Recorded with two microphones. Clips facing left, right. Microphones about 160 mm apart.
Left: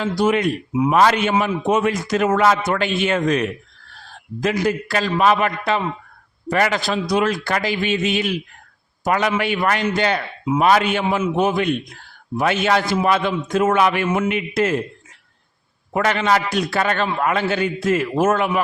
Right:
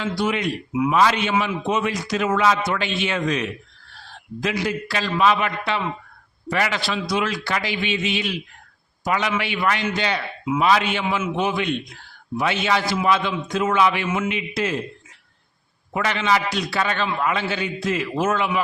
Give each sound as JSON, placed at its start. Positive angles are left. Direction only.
{"t": 0.0, "sound": "a man's voice", "side_deg": 45}
{"t": 15.9, "sound": "a man's voice", "side_deg": 50}